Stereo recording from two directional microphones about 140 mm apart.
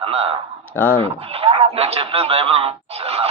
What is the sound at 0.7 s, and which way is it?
Speech, 15° left (ahead or behind).